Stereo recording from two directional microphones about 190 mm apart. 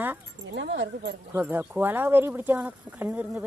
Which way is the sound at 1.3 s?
10° right (ahead or behind).